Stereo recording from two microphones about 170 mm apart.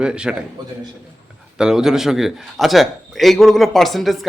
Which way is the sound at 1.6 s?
5° right (ahead or behind).